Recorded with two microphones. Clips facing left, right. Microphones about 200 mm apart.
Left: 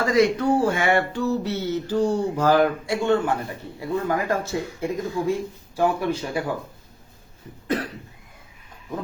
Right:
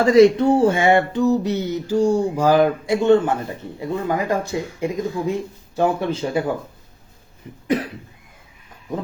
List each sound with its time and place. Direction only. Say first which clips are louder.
0.0 s speech: right 7 dB; 25° right (ahead or behind)
7.4 s cough: right 4 dB; 20° right (ahead or behind)